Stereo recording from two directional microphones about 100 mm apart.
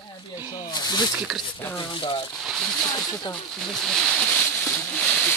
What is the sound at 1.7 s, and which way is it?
Speech, 55° left (ahead or behind).